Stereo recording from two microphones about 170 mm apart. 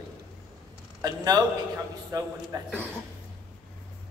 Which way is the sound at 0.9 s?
25° right (ahead or behind).